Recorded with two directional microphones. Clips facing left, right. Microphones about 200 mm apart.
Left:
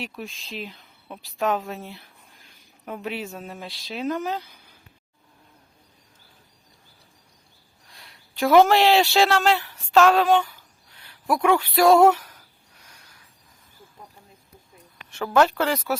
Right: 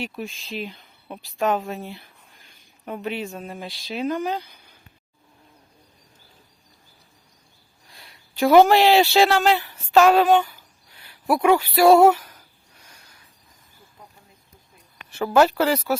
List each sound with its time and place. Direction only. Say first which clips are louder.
0.0 s speech: right 3 dB; centre (ahead or behind)
7.9 s speech: right 1 dB; centre (ahead or behind)
15.1 s speech: right 2 dB; 5° right (ahead or behind)